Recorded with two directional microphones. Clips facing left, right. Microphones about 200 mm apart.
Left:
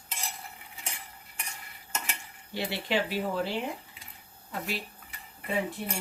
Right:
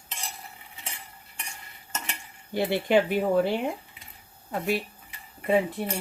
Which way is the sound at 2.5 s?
50° right (ahead or behind).